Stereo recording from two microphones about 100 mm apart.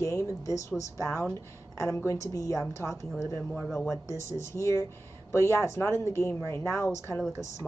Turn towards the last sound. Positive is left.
turn(degrees=30)  # may be behind; listen again after turning